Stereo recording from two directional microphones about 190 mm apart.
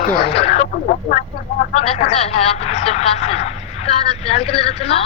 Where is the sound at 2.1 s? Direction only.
30° left (ahead or behind).